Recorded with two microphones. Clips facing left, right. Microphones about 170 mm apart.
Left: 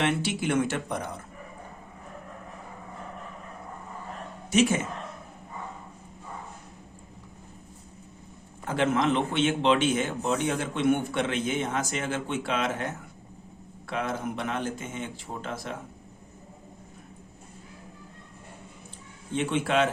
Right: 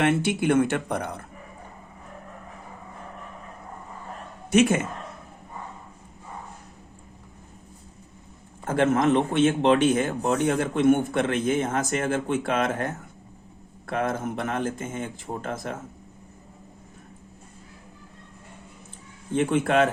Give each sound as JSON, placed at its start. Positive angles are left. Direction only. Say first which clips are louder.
{"t": 0.0, "sound": "speech", "louder": "right 5 dB", "side_deg": -55}
{"t": 4.5, "sound": "speech", "louder": "right 4 dB", "side_deg": -55}
{"t": 8.6, "sound": "speech", "louder": "right 4 dB", "side_deg": -45}
{"t": 19.3, "sound": "speech", "louder": "right 4 dB", "side_deg": -50}